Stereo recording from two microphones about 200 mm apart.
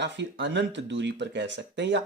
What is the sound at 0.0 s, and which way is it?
Speech, 65° right (ahead or behind).